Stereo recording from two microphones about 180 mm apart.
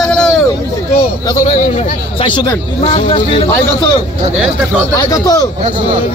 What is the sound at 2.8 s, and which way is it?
Speech, 35° left (ahead or behind).